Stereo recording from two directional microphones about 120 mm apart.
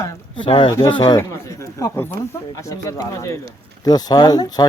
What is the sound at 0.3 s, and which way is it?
Speech, 45° left (ahead or behind).